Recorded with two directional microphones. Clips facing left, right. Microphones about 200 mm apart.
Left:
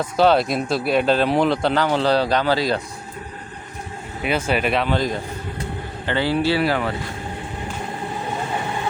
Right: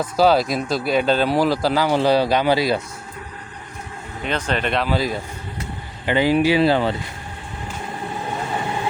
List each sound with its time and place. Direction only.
0.0 s speech: centre (ahead or behind)
4.2 s speech: 10° left (ahead or behind); by 6.9 s 25° right (ahead or behind)